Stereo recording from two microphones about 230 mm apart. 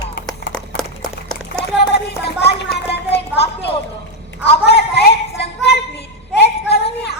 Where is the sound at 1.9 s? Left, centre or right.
Left.